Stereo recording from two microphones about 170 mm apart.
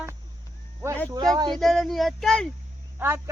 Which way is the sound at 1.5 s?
Centre (ahead or behind).